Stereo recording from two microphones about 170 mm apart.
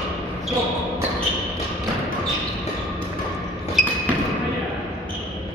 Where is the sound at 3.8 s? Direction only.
Centre (ahead or behind).